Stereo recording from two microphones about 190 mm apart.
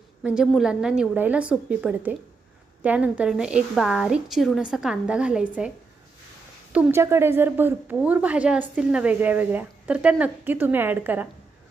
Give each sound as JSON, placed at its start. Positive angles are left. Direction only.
{"t": 0.2, "sound": "a woman's voice", "side_deg": -5}
{"t": 6.7, "sound": "a woman's voice", "side_deg": -10}